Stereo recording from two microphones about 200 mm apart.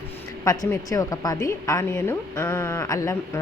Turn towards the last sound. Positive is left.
turn(degrees=15)  # may be behind; listen again after turning